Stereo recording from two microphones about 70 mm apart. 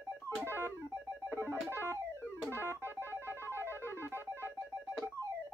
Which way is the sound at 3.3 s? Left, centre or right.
Left.